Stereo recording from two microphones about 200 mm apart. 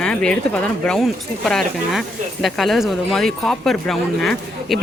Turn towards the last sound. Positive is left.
turn(degrees=0)  # may be behind; listen again after turning